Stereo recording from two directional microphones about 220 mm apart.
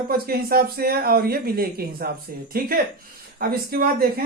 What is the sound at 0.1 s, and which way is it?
Speech, 40° right (ahead or behind).